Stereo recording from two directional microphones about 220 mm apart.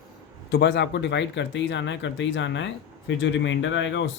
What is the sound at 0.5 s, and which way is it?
Speech, 50° left (ahead or behind).